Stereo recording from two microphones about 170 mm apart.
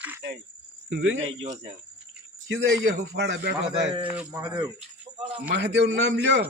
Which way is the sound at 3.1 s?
90° right.